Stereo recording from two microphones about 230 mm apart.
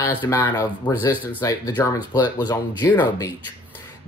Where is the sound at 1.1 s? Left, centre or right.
Centre.